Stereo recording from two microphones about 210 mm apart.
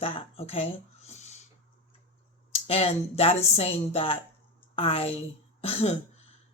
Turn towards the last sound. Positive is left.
turn(degrees=30)  # may be behind; listen again after turning